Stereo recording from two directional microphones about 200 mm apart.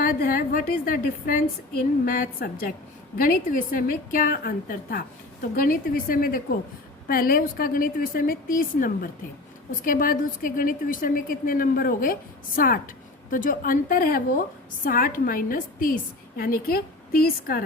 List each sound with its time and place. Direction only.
0.0 s a woman's voice: 45° left (ahead or behind)